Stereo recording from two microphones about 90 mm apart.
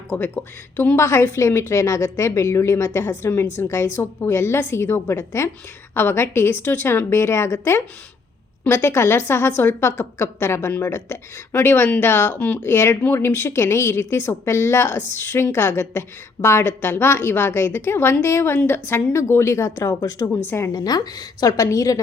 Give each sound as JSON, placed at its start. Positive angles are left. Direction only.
{"t": 0.3, "sound": "a woman's voice", "side_deg": 20}
{"t": 0.9, "sound": "a woman's voice", "side_deg": 30}
{"t": 12.6, "sound": "a woman's voice", "side_deg": 30}
{"t": 20.3, "sound": "a woman's voice", "side_deg": 25}
{"t": 20.7, "sound": "a woman's voice", "side_deg": 45}